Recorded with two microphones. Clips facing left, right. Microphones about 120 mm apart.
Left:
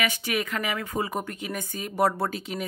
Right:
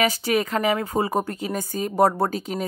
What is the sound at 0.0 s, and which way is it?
Speech, 35° right (ahead or behind).